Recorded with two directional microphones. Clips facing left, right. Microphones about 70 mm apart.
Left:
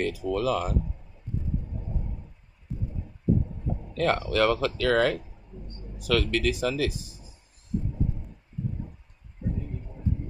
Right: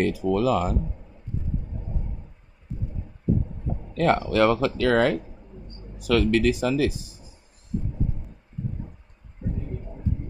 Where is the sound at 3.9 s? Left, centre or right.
Right.